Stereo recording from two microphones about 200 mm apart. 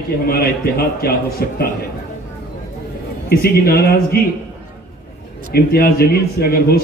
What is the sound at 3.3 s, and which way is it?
Speech, 50° left (ahead or behind).